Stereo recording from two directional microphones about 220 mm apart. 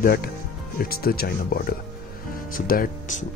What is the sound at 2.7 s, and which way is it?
Speech, 40° left (ahead or behind).